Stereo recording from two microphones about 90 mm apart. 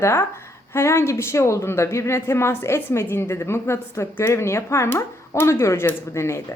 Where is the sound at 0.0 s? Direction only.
30° left (ahead or behind).